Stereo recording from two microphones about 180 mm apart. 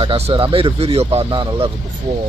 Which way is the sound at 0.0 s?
30° right (ahead or behind).